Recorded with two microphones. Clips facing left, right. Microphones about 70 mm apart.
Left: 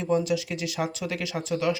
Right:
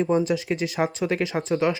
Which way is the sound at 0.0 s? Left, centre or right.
Right.